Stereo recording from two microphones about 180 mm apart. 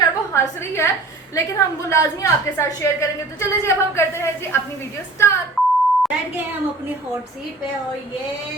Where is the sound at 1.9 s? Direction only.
15° left (ahead or behind).